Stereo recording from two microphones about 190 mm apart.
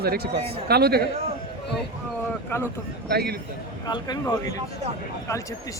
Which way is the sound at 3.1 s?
55° right (ahead or behind).